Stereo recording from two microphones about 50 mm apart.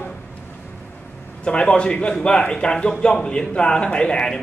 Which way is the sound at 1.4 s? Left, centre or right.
Left.